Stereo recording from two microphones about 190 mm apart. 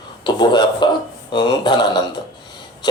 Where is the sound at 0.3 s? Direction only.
25° left (ahead or behind).